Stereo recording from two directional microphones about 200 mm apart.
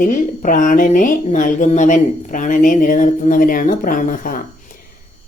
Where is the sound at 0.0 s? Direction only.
40° left (ahead or behind).